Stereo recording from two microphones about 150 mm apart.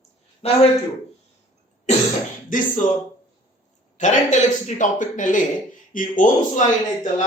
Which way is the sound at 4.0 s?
50° left (ahead or behind).